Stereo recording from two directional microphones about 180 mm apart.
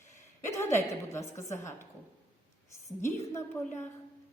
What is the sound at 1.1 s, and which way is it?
Speech, 15° left (ahead or behind).